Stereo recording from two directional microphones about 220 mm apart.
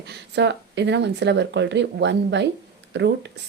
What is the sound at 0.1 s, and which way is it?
Speech, 55° right (ahead or behind).